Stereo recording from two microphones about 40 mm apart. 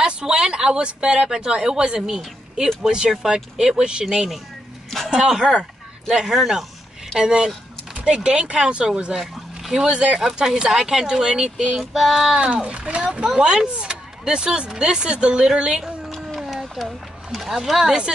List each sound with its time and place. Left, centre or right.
0.0 s speech: centre
5.1 s speech: centre
6.2 s speech: centre
7.2 s speech: right
9.2 s a sound: centre
9.8 s speech: right
10.2 s speech: centre
11.8 s speech: centre
12.4 s speech: right
16.3 s a sound: centre